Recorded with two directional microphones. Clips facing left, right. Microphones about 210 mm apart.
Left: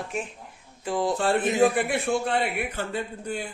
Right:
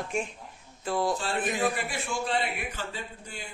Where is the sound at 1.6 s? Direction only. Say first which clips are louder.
Left 8 dB; 55° left (ahead or behind).